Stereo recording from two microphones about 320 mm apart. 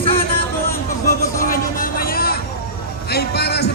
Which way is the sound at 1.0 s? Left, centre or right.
Left.